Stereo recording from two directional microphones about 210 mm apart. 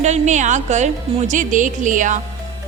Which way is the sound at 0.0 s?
35° right (ahead or behind).